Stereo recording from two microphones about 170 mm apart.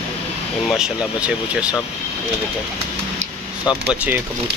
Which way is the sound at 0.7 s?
5° right (ahead or behind).